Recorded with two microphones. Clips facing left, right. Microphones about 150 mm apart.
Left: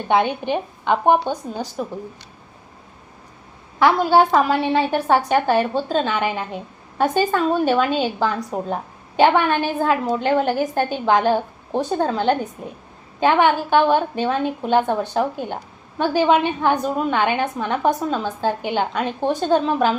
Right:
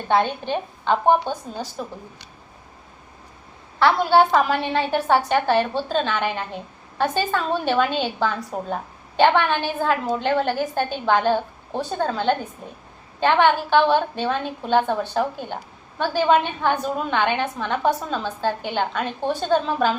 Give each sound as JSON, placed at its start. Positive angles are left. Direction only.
{"t": 0.1, "sound": "a woman's voice", "side_deg": 15}
{"t": 3.8, "sound": "a woman's voice", "side_deg": 10}